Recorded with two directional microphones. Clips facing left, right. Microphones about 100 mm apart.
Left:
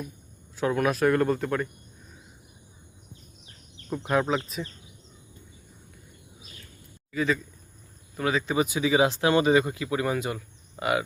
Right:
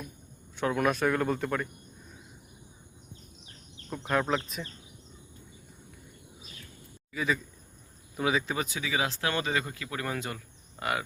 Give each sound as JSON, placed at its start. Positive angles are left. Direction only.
{"t": 0.5, "sound": "speech", "side_deg": 0}
{"t": 3.8, "sound": "speech", "side_deg": 5}
{"t": 7.1, "sound": "speech", "side_deg": -5}
{"t": 8.5, "sound": "speech", "side_deg": 10}
{"t": 8.8, "sound": "speech", "side_deg": 25}